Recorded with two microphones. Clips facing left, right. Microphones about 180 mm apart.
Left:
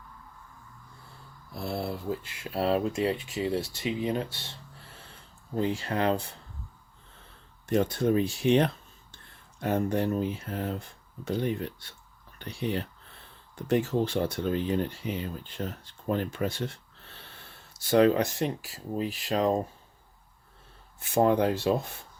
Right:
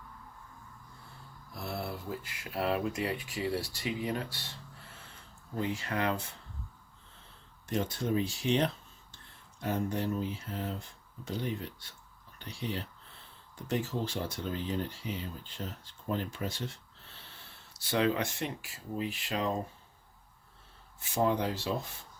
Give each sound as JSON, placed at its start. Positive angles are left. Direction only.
{"t": 1.5, "sound": "speech", "side_deg": 30}
{"t": 5.5, "sound": "speech", "side_deg": 30}
{"t": 7.7, "sound": "speech", "side_deg": 60}
{"t": 17.7, "sound": "speech", "side_deg": 45}
{"t": 21.0, "sound": "speech", "side_deg": 55}